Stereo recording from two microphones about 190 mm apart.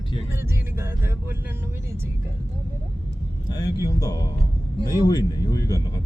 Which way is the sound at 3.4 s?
20° left (ahead or behind).